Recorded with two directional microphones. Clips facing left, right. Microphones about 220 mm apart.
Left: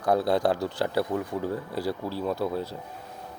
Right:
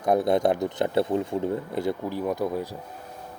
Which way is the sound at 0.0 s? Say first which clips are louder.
Right 2 dB; 20° right (ahead or behind).